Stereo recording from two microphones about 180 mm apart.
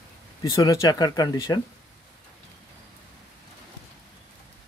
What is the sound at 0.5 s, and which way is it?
Speech, 20° left (ahead or behind).